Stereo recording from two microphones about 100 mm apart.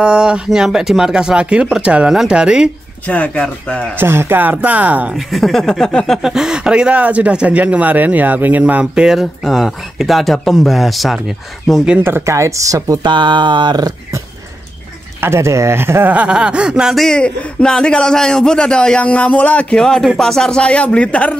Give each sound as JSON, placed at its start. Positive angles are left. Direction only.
{"t": 0.0, "sound": "speech", "side_deg": -10}
{"t": 3.1, "sound": "speech", "side_deg": 15}
{"t": 3.9, "sound": "speech", "side_deg": -20}
{"t": 5.1, "sound": "speech", "side_deg": 0}
{"t": 6.2, "sound": "speech", "side_deg": -5}
{"t": 12.0, "sound": "speech", "side_deg": -25}
{"t": 13.0, "sound": "speech", "side_deg": -50}
{"t": 15.1, "sound": "speech", "side_deg": -25}